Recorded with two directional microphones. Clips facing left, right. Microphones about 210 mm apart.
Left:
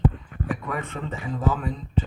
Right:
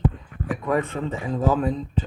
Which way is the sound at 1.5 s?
35° right (ahead or behind).